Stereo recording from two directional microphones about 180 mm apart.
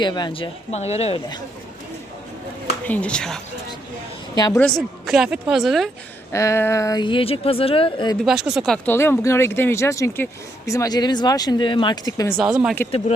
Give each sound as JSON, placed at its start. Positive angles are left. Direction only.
{"t": 0.0, "sound": "speech", "side_deg": 25}
{"t": 2.8, "sound": "speech", "side_deg": 10}
{"t": 4.5, "sound": "speech", "side_deg": 0}
{"t": 6.3, "sound": "speech", "side_deg": 15}
{"t": 8.2, "sound": "speech", "side_deg": 0}
{"t": 12.4, "sound": "speech", "side_deg": -5}